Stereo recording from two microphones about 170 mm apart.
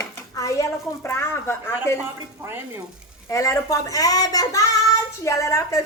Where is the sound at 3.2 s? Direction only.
20° left (ahead or behind).